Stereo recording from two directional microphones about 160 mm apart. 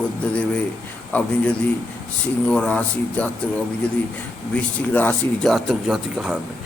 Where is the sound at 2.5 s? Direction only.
5° left (ahead or behind).